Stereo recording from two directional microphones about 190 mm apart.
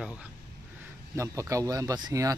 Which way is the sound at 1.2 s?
15° right (ahead or behind).